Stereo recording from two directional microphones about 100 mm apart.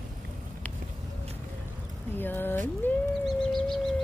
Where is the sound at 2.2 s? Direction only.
20° left (ahead or behind).